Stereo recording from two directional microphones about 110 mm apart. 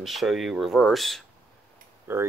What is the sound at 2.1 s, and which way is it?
Speech, 20° right (ahead or behind).